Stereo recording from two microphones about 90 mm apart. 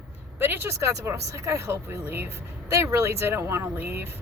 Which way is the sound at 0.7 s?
35° right (ahead or behind).